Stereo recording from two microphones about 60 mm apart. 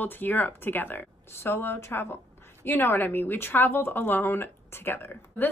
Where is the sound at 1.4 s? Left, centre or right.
Left.